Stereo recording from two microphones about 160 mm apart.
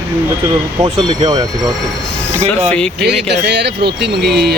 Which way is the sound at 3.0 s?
90° right.